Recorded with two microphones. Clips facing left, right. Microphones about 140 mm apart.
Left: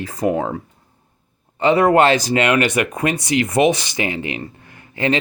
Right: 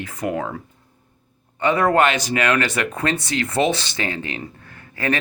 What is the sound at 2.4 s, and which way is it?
Speech, 20° left (ahead or behind).